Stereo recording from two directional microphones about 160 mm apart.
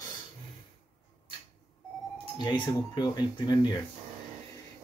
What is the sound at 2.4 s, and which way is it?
Speech, 30° left (ahead or behind).